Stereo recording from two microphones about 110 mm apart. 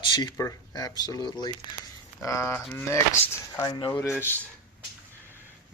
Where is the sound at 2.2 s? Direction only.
25° left (ahead or behind).